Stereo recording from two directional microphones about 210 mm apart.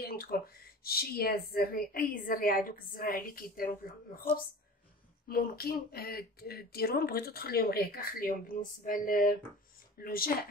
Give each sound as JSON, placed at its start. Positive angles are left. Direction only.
{"t": 0.0, "sound": "a sound", "side_deg": 45}
{"t": 0.8, "sound": "speech", "side_deg": 45}
{"t": 5.3, "sound": "speech", "side_deg": 45}